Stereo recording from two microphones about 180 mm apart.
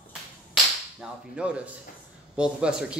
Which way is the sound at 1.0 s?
5° right (ahead or behind).